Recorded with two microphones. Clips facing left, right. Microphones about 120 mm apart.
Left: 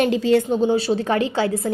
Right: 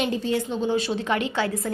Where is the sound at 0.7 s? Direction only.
30° left (ahead or behind).